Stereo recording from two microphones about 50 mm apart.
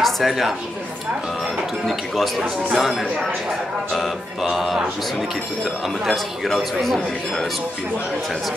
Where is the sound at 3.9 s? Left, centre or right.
Centre.